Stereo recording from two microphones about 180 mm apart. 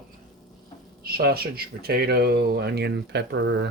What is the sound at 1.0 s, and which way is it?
Speech, 60° right (ahead or behind).